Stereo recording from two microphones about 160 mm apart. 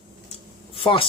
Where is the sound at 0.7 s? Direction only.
35° left (ahead or behind).